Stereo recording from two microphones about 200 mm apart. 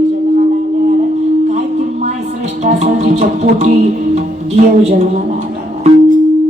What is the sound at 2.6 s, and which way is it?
Music, 35° right (ahead or behind).